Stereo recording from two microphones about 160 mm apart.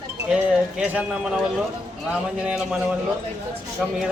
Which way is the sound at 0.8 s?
5° right (ahead or behind).